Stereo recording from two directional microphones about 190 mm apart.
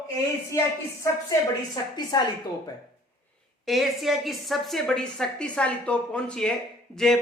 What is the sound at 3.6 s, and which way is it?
A woman's voice, centre (ahead or behind).